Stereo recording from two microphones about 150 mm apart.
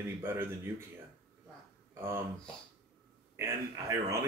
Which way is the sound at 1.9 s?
15° right (ahead or behind).